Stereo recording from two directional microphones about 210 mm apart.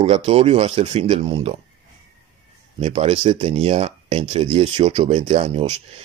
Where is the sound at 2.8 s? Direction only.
30° right (ahead or behind).